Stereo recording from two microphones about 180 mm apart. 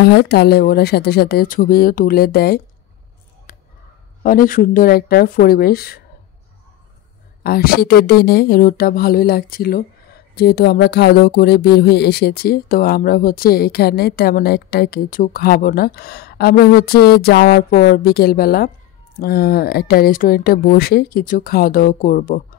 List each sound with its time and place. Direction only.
0.0 s speech: 65° left (ahead or behind)
3.5 s a sound: 50° left (ahead or behind)
4.2 s speech: 50° left (ahead or behind)
7.4 s speech: 55° left (ahead or behind)